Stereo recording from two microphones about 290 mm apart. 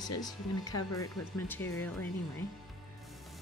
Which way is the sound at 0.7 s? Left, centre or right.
Left.